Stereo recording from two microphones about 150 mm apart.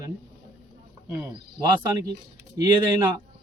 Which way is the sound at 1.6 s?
25° right (ahead or behind).